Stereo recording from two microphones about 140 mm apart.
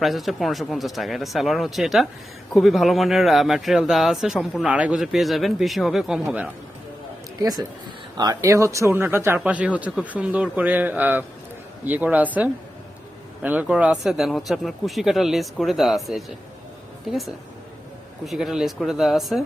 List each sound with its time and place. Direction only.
0.0 s speech: centre (ahead or behind)
7.3 s a man's voice: 25° right (ahead or behind); by 19.4 s centre (ahead or behind)